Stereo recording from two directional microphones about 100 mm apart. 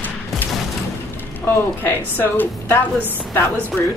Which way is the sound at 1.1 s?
20° left (ahead or behind).